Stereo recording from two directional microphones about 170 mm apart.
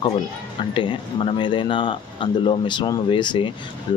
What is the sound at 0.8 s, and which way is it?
Speech, 30° left (ahead or behind).